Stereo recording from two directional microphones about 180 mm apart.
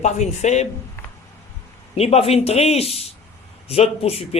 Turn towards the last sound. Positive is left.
turn(degrees=35)  # may be behind; listen again after turning